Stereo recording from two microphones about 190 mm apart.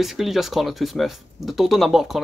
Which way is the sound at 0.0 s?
Centre (ahead or behind).